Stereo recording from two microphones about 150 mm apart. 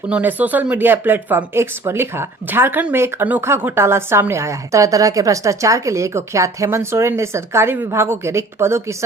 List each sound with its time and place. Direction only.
0.1 s speech: 10° right (ahead or behind)